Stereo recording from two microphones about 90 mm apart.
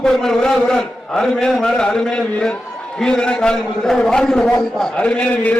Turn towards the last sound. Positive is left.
turn(degrees=15)  # may be behind; listen again after turning